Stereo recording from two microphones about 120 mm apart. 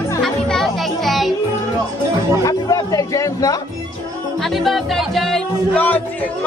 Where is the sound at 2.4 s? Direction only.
30° left (ahead or behind).